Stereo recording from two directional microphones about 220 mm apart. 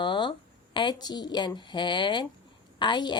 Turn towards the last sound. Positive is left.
turn(degrees=20)  # may be behind; listen again after turning